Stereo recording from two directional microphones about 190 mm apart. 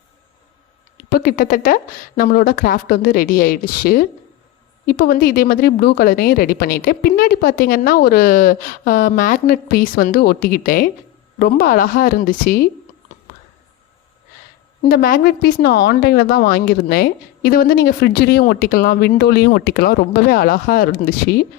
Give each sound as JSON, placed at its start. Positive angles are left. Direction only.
{"t": 1.1, "sound": "a woman's voice", "side_deg": 50}
{"t": 14.8, "sound": "a woman's voice", "side_deg": 50}